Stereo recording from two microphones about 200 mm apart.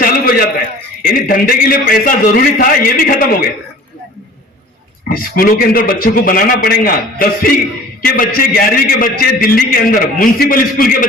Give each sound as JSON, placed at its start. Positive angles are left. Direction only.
{"t": 0.0, "sound": "a sound", "side_deg": 45}
{"t": 1.0, "sound": "a man's voice", "side_deg": 45}
{"t": 5.0, "sound": "a man's voice", "side_deg": 45}